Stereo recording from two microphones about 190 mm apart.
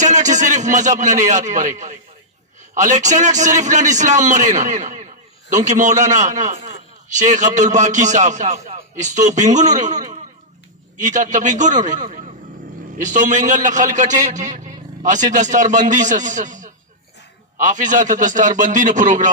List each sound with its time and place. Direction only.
0.0 s a man's voice: 40° right (ahead or behind)